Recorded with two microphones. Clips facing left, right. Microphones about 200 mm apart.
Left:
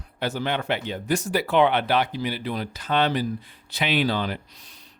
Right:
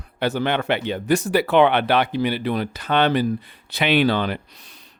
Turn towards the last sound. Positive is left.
turn(degrees=-65)  # may be behind; listen again after turning